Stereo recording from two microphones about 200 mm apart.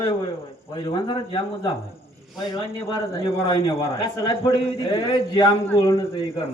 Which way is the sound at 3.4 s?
25° left (ahead or behind).